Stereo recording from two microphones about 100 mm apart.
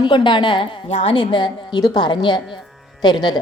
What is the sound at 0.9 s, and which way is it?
A woman's voice, 75° left (ahead or behind).